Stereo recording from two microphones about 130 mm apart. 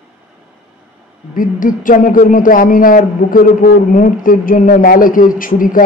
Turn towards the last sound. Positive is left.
turn(degrees=90)